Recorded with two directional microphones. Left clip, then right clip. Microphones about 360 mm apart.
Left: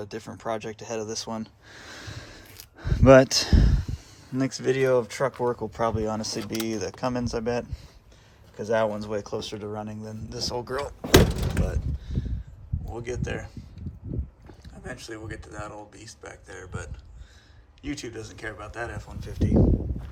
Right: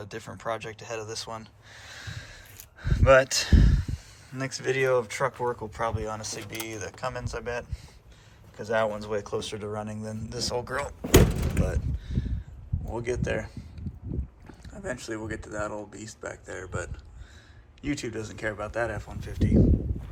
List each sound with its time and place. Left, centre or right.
0.0 s speech: centre
11.0 s door: left
11.6 s mechanisms: centre
12.9 s speech: centre